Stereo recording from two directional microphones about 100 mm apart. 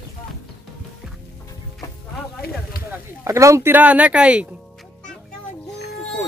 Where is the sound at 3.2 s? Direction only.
30° right (ahead or behind).